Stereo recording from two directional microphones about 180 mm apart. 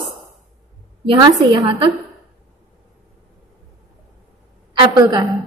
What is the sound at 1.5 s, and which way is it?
Speech, 25° right (ahead or behind).